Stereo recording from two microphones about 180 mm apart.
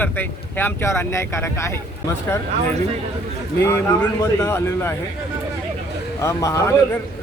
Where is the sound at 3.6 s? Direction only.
15° left (ahead or behind).